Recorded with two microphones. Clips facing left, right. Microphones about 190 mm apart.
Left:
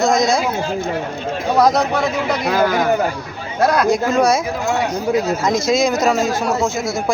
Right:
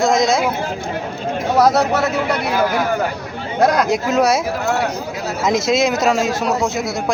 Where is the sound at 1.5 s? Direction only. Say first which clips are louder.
Right 1 dB; 5° right (ahead or behind).